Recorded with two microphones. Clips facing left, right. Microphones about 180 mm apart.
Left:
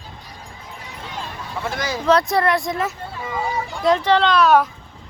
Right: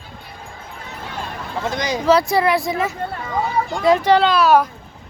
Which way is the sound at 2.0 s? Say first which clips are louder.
Right 1 dB; centre (ahead or behind).